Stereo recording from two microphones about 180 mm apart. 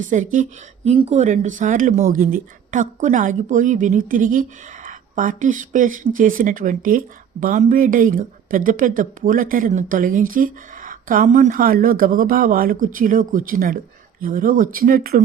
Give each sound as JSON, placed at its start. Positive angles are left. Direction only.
{"t": 0.0, "sound": "speech", "side_deg": -45}